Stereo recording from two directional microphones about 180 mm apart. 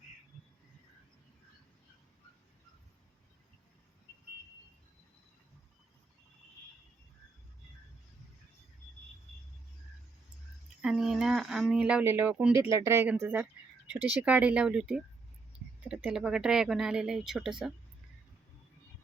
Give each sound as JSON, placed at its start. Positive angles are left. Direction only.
{"t": 10.8, "sound": "speech", "side_deg": -5}